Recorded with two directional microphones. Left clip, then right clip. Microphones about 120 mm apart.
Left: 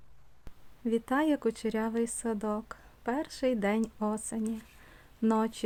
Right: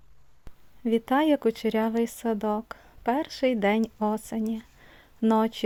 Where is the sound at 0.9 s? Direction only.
25° right (ahead or behind).